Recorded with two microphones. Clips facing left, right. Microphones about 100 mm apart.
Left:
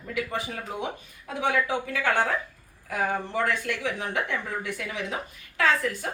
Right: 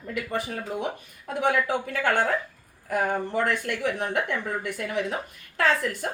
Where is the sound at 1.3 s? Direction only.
50° right (ahead or behind).